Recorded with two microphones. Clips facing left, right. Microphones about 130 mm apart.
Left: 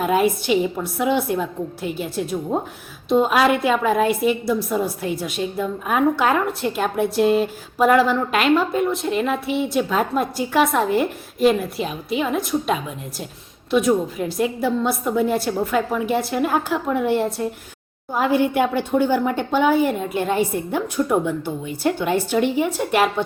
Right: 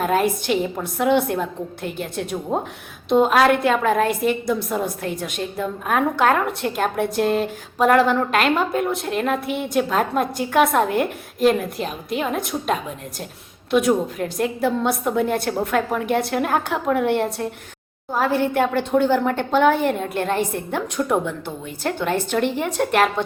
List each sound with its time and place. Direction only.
0.0 s a woman's voice: 5° left (ahead or behind)
4.0 s a woman's voice: 45° right (ahead or behind)
4.4 s a woman's voice: 5° left (ahead or behind)
18.1 s a woman's voice: 15° left (ahead or behind)